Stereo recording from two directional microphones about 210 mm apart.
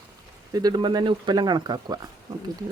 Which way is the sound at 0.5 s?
20° right (ahead or behind).